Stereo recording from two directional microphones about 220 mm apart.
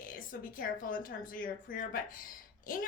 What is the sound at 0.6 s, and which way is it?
Speech, 40° left (ahead or behind).